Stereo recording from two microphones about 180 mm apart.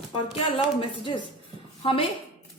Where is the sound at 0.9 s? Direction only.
25° left (ahead or behind).